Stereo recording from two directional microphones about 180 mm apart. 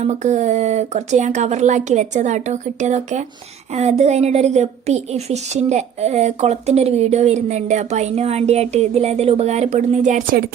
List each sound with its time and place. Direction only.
0.0 s a woman's voice: 40° right (ahead or behind)